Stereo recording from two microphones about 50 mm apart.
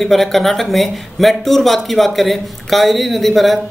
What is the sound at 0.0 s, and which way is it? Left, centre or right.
Speech, centre.